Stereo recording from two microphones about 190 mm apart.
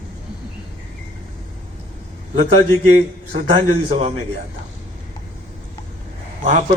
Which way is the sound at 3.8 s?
35° right (ahead or behind).